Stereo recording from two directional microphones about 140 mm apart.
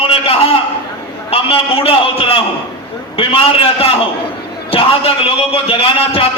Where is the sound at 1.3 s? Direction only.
45° left (ahead or behind).